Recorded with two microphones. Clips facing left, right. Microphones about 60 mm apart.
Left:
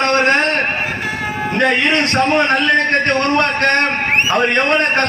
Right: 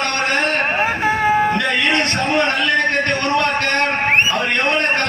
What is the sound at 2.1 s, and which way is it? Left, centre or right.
A man's voice, left.